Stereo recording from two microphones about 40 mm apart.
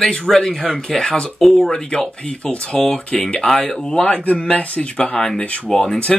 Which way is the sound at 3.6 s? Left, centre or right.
Centre.